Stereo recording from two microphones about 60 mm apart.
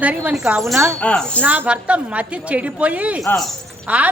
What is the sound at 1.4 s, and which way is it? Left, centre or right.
A woman's voice, right.